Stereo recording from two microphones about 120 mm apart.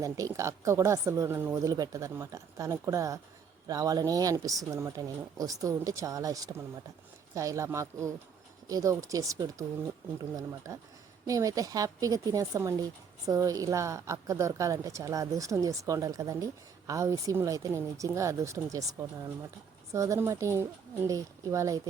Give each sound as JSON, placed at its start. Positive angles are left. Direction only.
{"t": 0.0, "sound": "a woman's voice", "side_deg": -25}
{"t": 1.6, "sound": "a woman's voice", "side_deg": -30}